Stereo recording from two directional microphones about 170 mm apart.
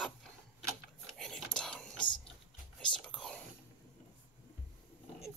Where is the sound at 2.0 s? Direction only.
25° left (ahead or behind).